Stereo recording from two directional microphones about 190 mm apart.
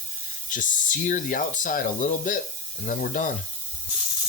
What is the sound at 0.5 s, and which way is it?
Speech, 45° left (ahead or behind).